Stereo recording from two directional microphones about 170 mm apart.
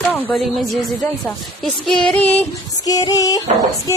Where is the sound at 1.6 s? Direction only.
5° left (ahead or behind).